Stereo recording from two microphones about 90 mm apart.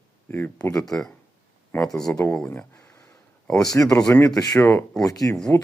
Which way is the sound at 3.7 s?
40° left (ahead or behind).